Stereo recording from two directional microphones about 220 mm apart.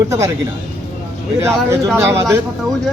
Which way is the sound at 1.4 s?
10° right (ahead or behind).